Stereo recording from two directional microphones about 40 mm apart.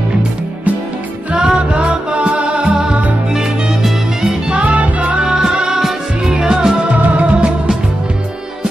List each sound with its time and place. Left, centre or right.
1.3 s music: centre
1.9 s music: right
4.5 s music: right
4.7 s music: right
5.2 s music: centre
5.8 s music: centre
6.3 s music: right
6.9 s music: right